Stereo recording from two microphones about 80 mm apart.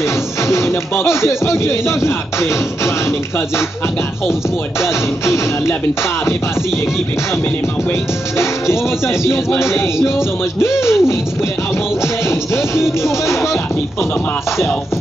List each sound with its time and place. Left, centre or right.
0.5 s speech: left
5.2 s speech: left
8.4 s speech: left